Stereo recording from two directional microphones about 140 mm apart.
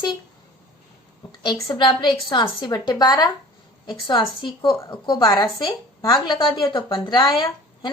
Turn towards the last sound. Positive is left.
turn(degrees=30)  # may be behind; listen again after turning